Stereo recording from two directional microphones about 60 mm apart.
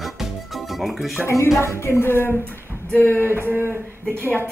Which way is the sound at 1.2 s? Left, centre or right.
Left.